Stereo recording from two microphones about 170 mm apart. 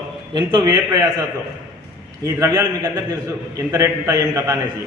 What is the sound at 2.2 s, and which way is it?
A man's voice, 15° right (ahead or behind).